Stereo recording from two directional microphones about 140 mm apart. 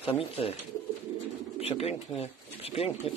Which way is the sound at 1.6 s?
45° left (ahead or behind).